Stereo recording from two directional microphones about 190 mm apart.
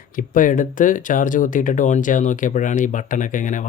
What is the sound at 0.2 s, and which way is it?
Speech, 45° left (ahead or behind).